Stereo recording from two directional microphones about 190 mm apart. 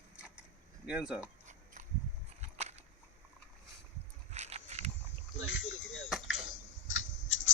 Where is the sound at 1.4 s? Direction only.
40° right (ahead or behind).